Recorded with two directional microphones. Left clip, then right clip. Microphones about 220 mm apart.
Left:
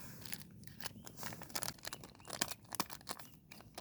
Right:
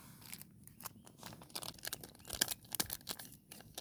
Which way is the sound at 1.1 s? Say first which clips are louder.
Left 4 dB; 25° left (ahead or behind).